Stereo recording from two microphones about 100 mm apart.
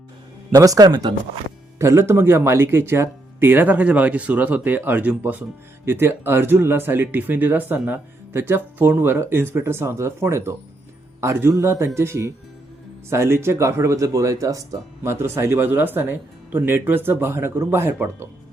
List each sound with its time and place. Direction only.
0.5 s speech: 35° right (ahead or behind)
1.8 s speech: 25° right (ahead or behind)